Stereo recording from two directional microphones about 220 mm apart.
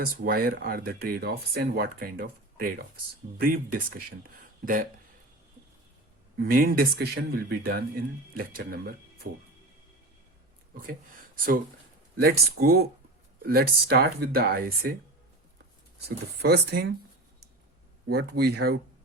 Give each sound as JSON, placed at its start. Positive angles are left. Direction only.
{"t": 0.0, "sound": "speech", "side_deg": -40}
{"t": 6.4, "sound": "speech", "side_deg": -40}
{"t": 12.1, "sound": "speech", "side_deg": -40}
{"t": 16.0, "sound": "speech", "side_deg": -45}
{"t": 18.1, "sound": "speech", "side_deg": -45}